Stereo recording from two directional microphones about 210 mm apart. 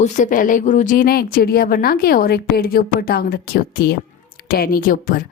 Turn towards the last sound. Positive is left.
turn(degrees=40)  # may be behind; listen again after turning